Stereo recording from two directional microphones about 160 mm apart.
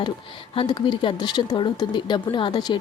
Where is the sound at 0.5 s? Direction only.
30° left (ahead or behind).